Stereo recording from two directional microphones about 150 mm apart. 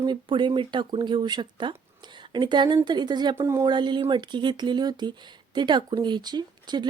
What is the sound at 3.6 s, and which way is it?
A woman's voice, 30° right (ahead or behind).